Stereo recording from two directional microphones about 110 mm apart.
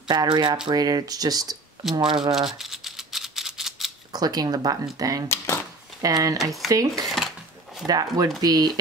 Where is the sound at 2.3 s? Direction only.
5° right (ahead or behind).